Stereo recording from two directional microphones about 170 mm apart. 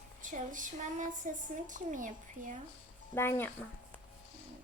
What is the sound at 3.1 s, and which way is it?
Speech, 15° left (ahead or behind).